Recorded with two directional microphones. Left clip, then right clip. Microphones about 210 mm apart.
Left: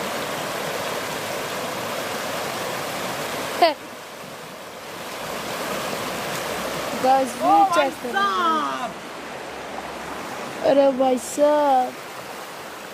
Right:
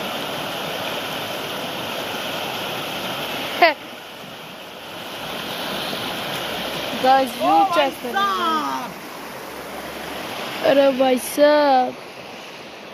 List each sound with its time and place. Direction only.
3.6 s speech: centre (ahead or behind)
7.1 s speech: centre (ahead or behind)
8.1 s speech: 30° right (ahead or behind)
10.6 s speech: 10° left (ahead or behind)